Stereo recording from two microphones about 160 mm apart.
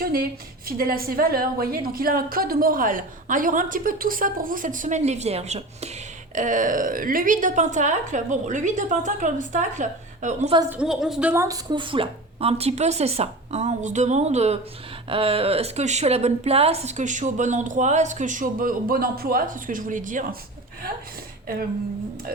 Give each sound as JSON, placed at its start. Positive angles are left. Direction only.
{"t": 0.0, "sound": "a woman's voice", "side_deg": -65}
{"t": 6.3, "sound": "a woman's voice", "side_deg": -55}
{"t": 10.7, "sound": "a woman's voice", "side_deg": -5}
{"t": 11.4, "sound": "a woman's voice", "side_deg": -25}